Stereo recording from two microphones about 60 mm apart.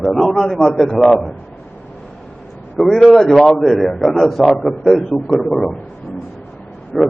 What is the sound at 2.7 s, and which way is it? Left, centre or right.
A man's voice, centre.